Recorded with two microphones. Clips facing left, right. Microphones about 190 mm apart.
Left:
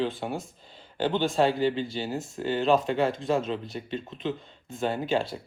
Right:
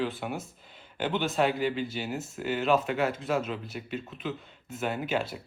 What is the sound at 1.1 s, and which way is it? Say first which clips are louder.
Speech: left 3 dB; 25° left (ahead or behind).